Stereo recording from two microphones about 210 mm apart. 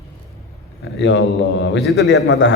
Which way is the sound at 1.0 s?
60° left (ahead or behind).